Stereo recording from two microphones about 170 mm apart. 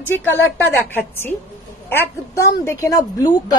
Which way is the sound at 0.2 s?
10° left (ahead or behind).